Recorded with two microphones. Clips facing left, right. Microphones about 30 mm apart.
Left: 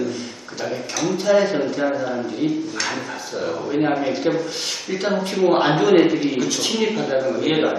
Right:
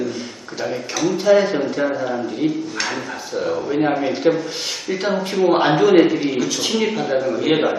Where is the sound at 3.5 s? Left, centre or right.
Centre.